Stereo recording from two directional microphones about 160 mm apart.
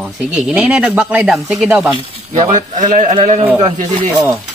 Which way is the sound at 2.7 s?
50° right (ahead or behind).